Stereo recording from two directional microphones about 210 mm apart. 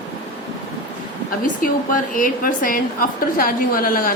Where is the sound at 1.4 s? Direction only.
40° left (ahead or behind).